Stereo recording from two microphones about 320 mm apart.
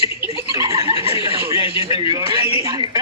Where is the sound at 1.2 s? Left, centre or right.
Centre.